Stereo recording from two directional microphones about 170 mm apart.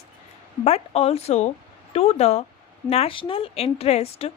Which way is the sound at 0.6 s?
40° left (ahead or behind).